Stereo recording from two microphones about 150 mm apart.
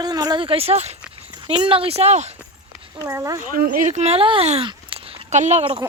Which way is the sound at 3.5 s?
65° right (ahead or behind).